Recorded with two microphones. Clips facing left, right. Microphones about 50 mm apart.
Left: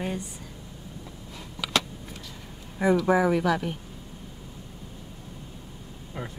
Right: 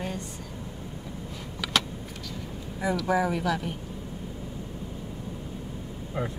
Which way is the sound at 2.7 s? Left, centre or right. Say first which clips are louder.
Left 4 dB; left.